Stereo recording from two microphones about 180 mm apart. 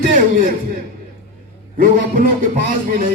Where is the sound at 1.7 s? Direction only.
45° right (ahead or behind).